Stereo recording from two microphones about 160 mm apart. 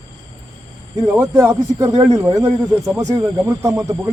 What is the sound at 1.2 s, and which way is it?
Speech, 15° right (ahead or behind).